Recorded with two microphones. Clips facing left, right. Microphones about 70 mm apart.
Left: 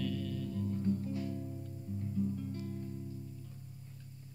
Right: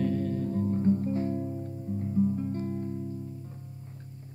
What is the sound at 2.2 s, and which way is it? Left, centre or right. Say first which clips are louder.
Music: right 9 dB; right.